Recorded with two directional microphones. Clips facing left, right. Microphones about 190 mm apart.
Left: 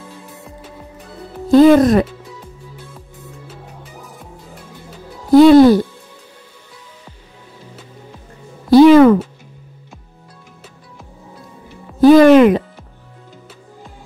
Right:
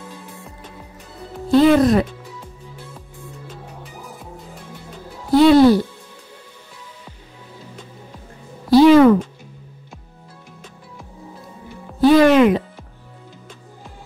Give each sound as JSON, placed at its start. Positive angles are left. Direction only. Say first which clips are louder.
{"t": 1.5, "sound": "speech", "louder": "left 4 dB", "side_deg": 45}
{"t": 5.3, "sound": "speech", "louder": "left 5 dB", "side_deg": 45}
{"t": 8.6, "sound": "music", "louder": "left 3 dB", "side_deg": 50}
{"t": 12.0, "sound": "speech", "louder": "left 5 dB", "side_deg": 45}